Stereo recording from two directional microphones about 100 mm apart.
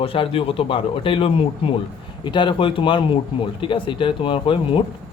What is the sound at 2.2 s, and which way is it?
Speech, 50° left (ahead or behind).